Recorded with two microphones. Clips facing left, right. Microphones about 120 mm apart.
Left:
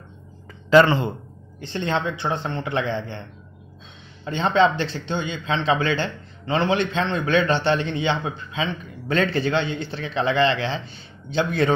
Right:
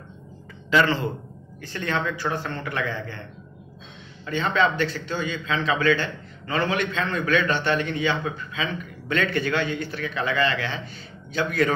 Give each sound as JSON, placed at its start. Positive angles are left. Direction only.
{"t": 0.8, "sound": "a man's voice", "side_deg": 25}
{"t": 4.2, "sound": "a man's voice", "side_deg": 30}